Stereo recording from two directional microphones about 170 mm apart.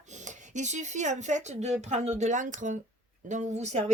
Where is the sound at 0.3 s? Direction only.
45° right (ahead or behind).